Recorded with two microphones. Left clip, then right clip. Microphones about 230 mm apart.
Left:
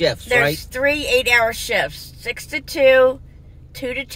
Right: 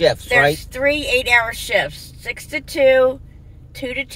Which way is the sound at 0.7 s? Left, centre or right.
Centre.